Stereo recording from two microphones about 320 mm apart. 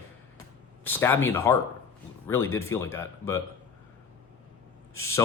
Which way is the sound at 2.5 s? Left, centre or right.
Centre.